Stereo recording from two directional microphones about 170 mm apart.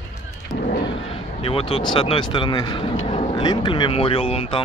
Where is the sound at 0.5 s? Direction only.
55° left (ahead or behind).